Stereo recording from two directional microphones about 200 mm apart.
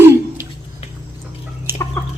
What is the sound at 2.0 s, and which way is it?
Chicken, 10° left (ahead or behind).